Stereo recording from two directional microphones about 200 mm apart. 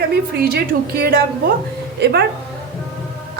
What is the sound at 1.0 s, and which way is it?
A woman's voice, 50° right (ahead or behind).